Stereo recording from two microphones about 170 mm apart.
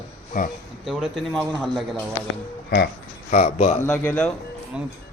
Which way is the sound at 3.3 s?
40° left (ahead or behind).